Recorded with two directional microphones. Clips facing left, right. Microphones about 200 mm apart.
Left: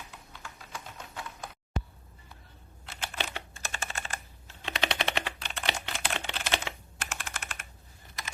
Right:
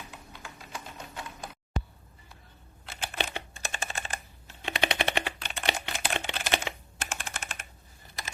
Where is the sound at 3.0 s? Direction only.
15° right (ahead or behind).